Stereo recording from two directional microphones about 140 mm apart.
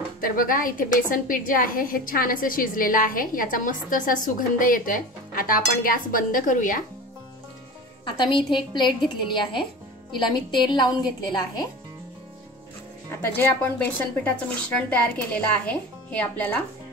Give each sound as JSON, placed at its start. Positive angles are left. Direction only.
{"t": 0.2, "sound": "a woman's voice", "side_deg": 80}
{"t": 8.0, "sound": "a woman's voice", "side_deg": 35}
{"t": 13.2, "sound": "speech", "side_deg": 15}